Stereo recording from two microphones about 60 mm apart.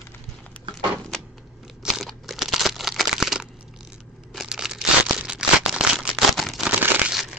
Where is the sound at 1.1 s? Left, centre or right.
Centre.